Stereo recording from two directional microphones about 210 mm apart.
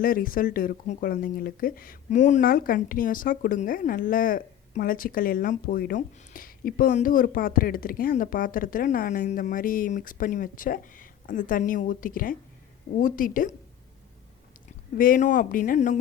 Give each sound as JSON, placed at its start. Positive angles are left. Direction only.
{"t": 0.0, "sound": "speech", "side_deg": 40}
{"t": 14.9, "sound": "speech", "side_deg": 40}